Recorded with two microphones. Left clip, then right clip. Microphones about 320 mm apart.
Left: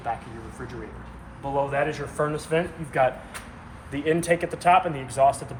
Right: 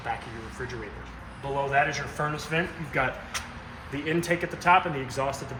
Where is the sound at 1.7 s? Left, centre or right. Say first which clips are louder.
Right 1 dB; centre.